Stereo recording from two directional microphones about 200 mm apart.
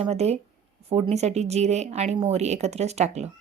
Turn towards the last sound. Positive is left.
turn(degrees=-35)  # may be behind; listen again after turning